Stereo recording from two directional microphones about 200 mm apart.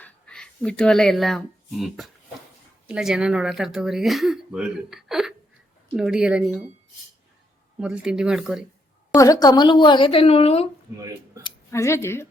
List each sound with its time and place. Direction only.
0.0 s speech: 5° left (ahead or behind)
7.8 s speech: 5° right (ahead or behind)
9.1 s a woman's voice: 15° left (ahead or behind)
10.9 s speech: 15° right (ahead or behind)
11.4 s speech: 15° left (ahead or behind)